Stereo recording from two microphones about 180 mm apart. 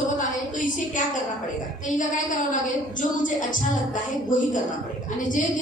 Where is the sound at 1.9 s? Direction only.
45° left (ahead or behind).